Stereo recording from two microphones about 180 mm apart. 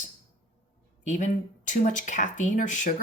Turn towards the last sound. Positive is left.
turn(degrees=45)  # may be behind; listen again after turning